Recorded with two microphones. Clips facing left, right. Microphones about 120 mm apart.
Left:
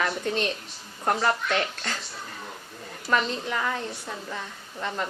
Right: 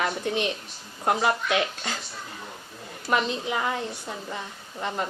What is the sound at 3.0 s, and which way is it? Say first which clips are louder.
Speech: right 1 dB; 15° right (ahead or behind).